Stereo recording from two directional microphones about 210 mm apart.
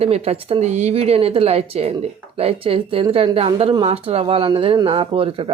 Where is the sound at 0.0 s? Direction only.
30° right (ahead or behind).